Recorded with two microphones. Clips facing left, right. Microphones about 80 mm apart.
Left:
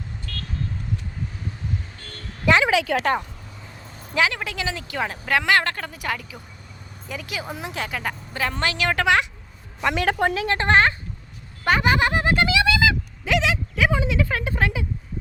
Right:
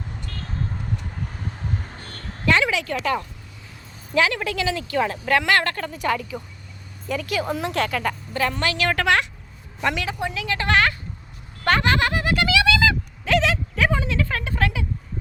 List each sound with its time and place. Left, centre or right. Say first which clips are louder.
0.3 s vehicle: left 1 dB; right
2.6 s a woman's voice: left 4 dB; left
4.1 s a woman's voice: right 2 dB; centre
10.1 s a woman's voice: left 7 dB; left
10.3 s a woman's voice: right 1 dB; left
11.6 s a sound: even; centre
12.8 s a sound: even; centre
14.0 s speech: left 2 dB; centre